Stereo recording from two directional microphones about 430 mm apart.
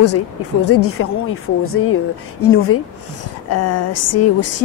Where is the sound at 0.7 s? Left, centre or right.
Left.